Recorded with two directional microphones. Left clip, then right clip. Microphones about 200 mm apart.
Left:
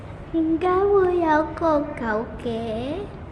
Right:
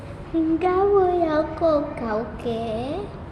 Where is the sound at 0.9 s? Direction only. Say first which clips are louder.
Left 1 dB; 15° left (ahead or behind).